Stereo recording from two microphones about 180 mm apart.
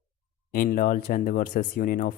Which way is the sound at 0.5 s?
50° left (ahead or behind).